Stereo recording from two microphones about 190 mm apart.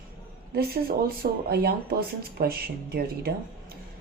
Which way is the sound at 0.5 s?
50° right (ahead or behind).